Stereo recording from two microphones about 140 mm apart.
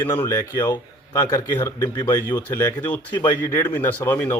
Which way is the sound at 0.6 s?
30° left (ahead or behind).